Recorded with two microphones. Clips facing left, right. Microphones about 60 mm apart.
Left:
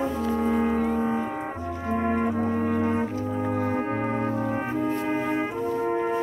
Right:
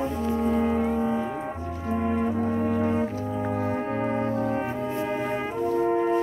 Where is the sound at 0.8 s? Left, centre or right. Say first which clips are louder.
Even; left.